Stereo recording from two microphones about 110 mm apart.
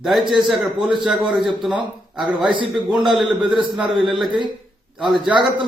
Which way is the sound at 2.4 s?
50° right (ahead or behind).